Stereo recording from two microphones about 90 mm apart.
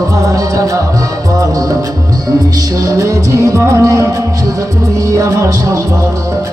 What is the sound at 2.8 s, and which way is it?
Music, 40° right (ahead or behind).